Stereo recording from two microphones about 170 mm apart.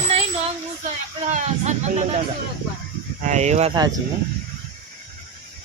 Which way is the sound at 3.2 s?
45° right (ahead or behind).